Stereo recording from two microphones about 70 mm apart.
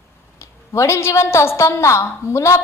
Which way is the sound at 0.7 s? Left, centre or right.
Left.